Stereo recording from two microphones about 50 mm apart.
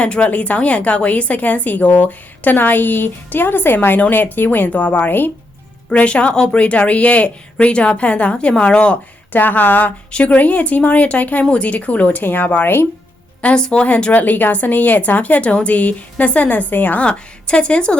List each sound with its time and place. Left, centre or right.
0.0 s a woman's voice: left
5.9 s a woman's voice: left
9.3 s a woman's voice: left
10.1 s a woman's voice: left
12.6 s speech: left
13.4 s a woman's voice: left
14.1 s a woman's voice: left
17.1 s a woman's voice: centre